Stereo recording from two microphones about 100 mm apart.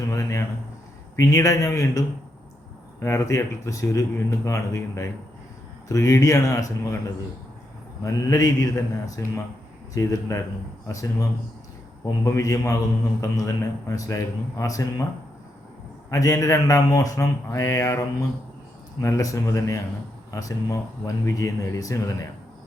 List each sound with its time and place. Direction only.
0.1 s a sound: 30° left (ahead or behind)
1.1 s speech: 30° left (ahead or behind)
8.0 s speech: 35° left (ahead or behind)
16.0 s speech: 35° left (ahead or behind)
19.0 s speech: 30° left (ahead or behind)